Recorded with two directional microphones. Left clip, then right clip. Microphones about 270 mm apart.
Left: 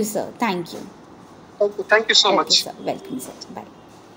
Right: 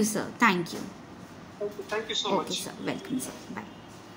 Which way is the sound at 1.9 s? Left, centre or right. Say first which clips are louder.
Left 14 dB; left.